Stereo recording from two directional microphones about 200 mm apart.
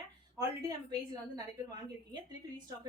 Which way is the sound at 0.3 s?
20° right (ahead or behind).